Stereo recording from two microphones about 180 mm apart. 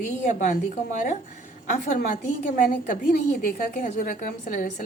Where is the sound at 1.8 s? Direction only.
45° left (ahead or behind).